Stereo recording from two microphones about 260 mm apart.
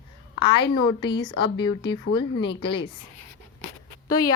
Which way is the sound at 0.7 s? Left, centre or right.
Centre.